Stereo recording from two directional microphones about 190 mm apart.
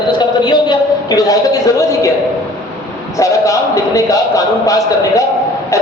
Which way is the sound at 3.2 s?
15° left (ahead or behind).